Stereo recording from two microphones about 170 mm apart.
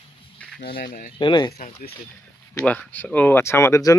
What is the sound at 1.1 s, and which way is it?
Speech, 30° left (ahead or behind).